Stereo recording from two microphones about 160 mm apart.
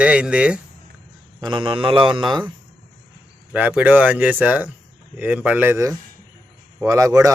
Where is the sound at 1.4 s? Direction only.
30° right (ahead or behind).